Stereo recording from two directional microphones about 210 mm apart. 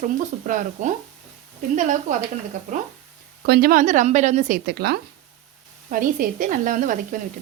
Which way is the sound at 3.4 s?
45° right (ahead or behind).